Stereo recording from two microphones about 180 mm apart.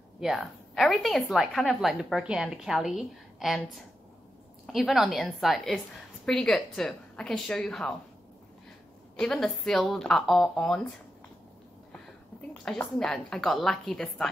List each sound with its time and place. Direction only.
0.2 s a woman's voice: centre (ahead or behind)
9.1 s a woman's voice: 5° left (ahead or behind)
12.4 s a woman's voice: 5° left (ahead or behind)